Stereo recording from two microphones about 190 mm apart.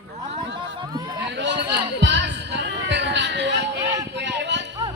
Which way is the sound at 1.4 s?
65° right (ahead or behind).